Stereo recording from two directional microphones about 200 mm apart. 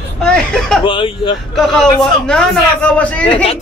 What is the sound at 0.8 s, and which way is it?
Speech, 25° left (ahead or behind).